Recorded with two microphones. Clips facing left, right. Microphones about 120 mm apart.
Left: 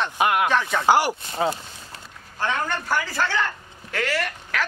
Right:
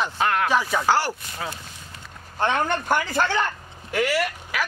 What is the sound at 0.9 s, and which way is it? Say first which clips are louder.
Speech: left 4 dB; 15° left (ahead or behind).